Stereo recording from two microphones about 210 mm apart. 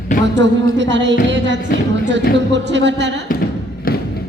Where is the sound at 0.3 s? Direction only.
60° right (ahead or behind).